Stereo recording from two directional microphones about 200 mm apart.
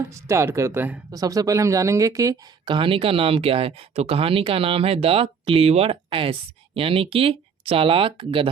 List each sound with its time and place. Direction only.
0.1 s speech: 15° right (ahead or behind)